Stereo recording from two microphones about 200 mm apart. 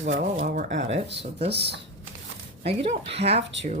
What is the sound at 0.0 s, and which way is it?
Speech, 35° right (ahead or behind).